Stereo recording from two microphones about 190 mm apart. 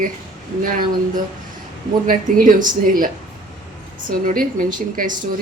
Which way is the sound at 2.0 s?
45° right (ahead or behind).